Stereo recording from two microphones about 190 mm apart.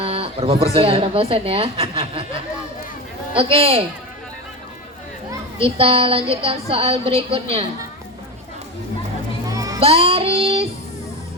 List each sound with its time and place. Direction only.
0.0 s speech: 30° right (ahead or behind)
3.3 s child singing: 30° right (ahead or behind)
5.5 s a woman's voice: 30° right (ahead or behind)
9.5 s music: 20° right (ahead or behind)
9.8 s child singing: 30° right (ahead or behind)